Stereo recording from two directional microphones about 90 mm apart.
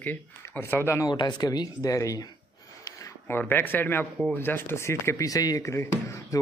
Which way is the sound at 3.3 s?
20° left (ahead or behind).